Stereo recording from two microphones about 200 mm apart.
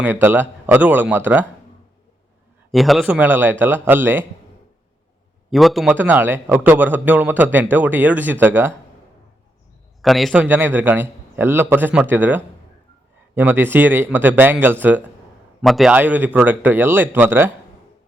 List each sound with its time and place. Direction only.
0.0 s a man's voice: 10° right (ahead or behind)
2.7 s a man's voice: centre (ahead or behind)
5.5 s a man's voice: centre (ahead or behind)
10.0 s a man's voice: centre (ahead or behind)